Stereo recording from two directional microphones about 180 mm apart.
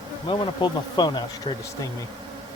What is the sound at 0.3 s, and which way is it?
Speech, 25° left (ahead or behind).